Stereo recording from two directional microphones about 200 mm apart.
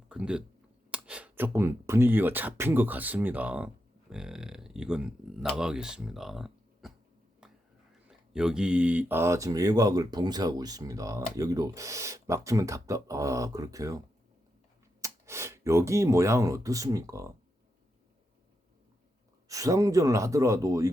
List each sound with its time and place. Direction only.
0.1 s speech: 5° right (ahead or behind)
7.4 s a sound: 5° right (ahead or behind)
8.0 s speech: 5° right (ahead or behind)
15.0 s speech: 15° right (ahead or behind)
19.5 s speech: 15° right (ahead or behind)